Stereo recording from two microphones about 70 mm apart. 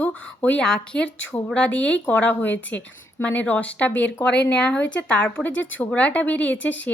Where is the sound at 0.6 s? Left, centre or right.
Centre.